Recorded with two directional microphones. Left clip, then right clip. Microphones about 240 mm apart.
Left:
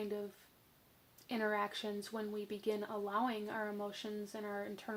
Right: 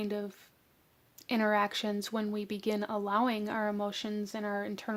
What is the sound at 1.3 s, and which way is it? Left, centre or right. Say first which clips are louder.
Speech: right 8 dB; right.